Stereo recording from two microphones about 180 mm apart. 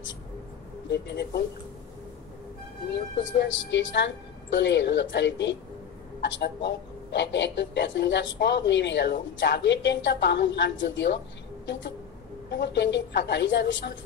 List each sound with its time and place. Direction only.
0.8 s speech: 70° left (ahead or behind)
2.9 s speech: 75° left (ahead or behind)
12.4 s speech: 75° left (ahead or behind)